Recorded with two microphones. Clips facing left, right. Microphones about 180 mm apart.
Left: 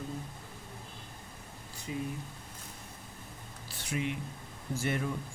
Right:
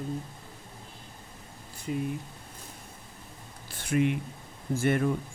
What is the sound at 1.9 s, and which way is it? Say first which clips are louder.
Speech: right 5 dB; 55° right (ahead or behind).